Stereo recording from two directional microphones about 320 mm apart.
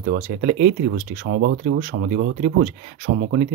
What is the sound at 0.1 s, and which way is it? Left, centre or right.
Speech, right.